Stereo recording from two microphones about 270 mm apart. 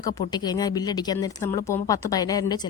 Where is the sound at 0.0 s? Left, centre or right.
Centre.